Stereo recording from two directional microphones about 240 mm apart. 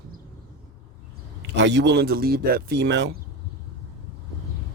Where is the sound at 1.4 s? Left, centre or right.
Right.